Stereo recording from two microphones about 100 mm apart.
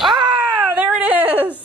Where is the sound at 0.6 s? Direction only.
15° right (ahead or behind).